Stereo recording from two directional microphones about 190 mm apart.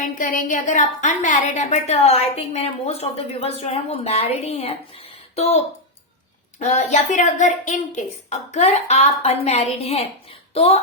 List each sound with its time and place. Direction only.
0.2 s a woman's voice: 45° left (ahead or behind)